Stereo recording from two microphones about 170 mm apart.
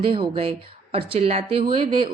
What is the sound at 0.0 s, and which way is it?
A woman's voice, 30° right (ahead or behind).